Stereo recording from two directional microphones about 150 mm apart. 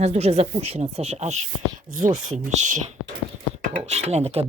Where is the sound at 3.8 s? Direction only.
45° right (ahead or behind).